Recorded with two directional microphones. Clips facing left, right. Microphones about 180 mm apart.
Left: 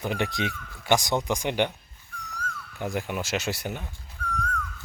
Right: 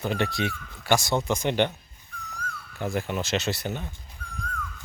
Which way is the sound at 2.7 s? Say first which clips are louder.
Right 2 dB; 15° left (ahead or behind).